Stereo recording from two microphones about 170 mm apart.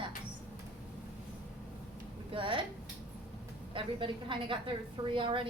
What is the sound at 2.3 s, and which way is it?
Speech, 30° right (ahead or behind).